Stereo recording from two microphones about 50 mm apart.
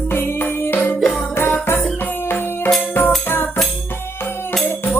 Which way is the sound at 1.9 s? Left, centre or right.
Left.